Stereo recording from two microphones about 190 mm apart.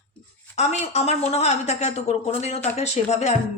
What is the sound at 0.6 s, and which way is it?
Speech, 35° left (ahead or behind).